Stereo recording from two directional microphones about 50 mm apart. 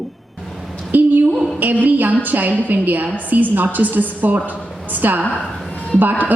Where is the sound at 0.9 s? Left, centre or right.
Right.